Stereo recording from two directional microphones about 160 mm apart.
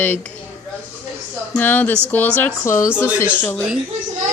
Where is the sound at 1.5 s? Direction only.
10° left (ahead or behind).